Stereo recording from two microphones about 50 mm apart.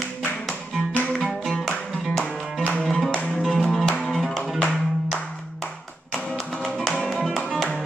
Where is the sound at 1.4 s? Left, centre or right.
Centre.